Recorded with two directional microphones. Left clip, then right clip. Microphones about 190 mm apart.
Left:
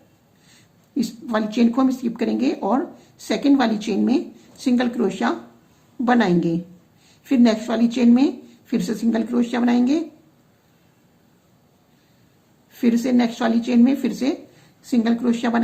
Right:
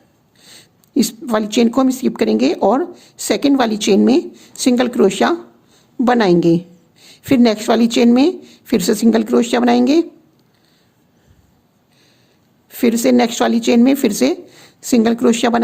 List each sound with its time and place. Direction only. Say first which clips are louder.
0.4 s speech: right 12 dB; 65° right (ahead or behind)
12.8 s speech: right 7 dB; 65° right (ahead or behind)